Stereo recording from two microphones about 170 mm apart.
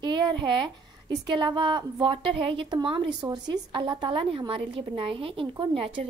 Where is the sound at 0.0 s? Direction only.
25° right (ahead or behind).